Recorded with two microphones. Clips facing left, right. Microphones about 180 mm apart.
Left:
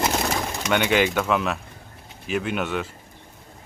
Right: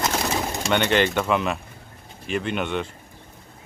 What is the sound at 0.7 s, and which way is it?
Speech, 5° left (ahead or behind).